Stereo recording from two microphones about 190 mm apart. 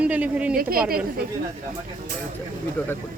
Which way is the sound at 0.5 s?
50° right (ahead or behind).